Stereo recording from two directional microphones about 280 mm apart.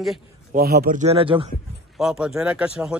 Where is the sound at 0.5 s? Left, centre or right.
Right.